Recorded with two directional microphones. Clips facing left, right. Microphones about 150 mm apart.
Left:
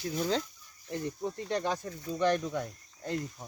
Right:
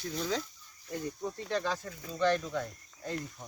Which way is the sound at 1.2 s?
20° left (ahead or behind).